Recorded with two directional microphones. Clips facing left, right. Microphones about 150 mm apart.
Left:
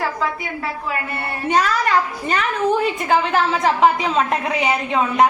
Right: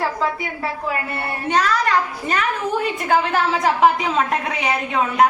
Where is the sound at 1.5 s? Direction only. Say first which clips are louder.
Left 1 dB; 5° left (ahead or behind).